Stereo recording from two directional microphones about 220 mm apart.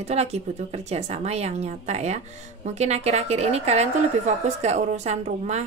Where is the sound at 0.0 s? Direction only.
30° right (ahead or behind).